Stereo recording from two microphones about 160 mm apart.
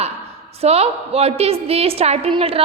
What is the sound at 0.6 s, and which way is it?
A woman's voice, 40° right (ahead or behind).